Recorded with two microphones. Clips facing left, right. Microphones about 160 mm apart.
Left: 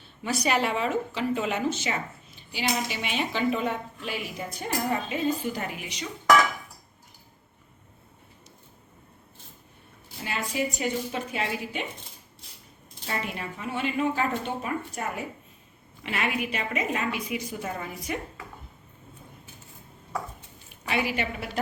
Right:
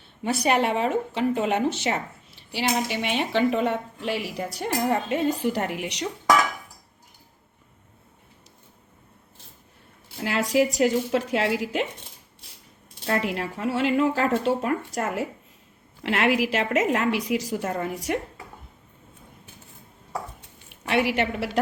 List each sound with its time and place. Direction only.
0.2 s a woman's voice: 55° right (ahead or behind); by 6.1 s 75° right (ahead or behind)
10.5 s a woman's voice: 90° right
13.1 s a woman's voice: 90° right; by 18.2 s 70° right (ahead or behind)
20.7 s a woman's voice: 70° right (ahead or behind)